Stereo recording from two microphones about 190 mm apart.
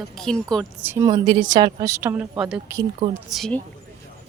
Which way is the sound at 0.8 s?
10° right (ahead or behind).